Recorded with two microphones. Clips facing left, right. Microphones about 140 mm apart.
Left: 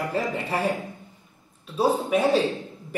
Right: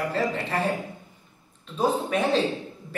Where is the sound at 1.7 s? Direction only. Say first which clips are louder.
Left 2 dB; 10° left (ahead or behind).